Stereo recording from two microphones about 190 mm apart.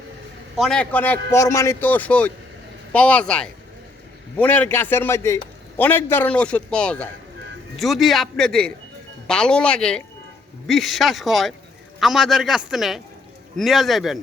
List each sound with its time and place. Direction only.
0.5 s a man's voice: centre (ahead or behind)